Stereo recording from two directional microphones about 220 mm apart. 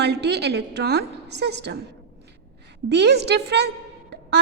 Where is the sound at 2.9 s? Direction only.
50° right (ahead or behind).